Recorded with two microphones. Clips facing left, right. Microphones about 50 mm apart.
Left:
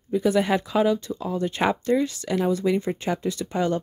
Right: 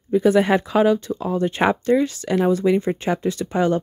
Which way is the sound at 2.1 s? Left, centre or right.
Right.